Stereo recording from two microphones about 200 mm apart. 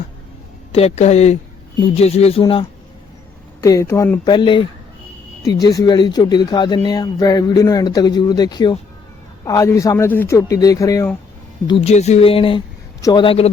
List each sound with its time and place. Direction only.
0.7 s speech: 30° left (ahead or behind)
3.6 s a man's voice: 15° left (ahead or behind)
11.7 s speech: 30° left (ahead or behind)